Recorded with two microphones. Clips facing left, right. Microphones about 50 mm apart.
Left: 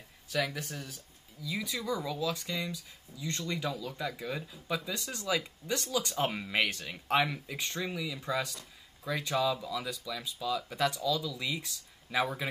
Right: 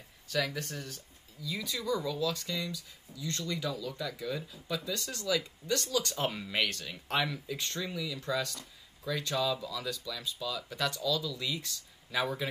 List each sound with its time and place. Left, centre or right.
0.3 s speech: centre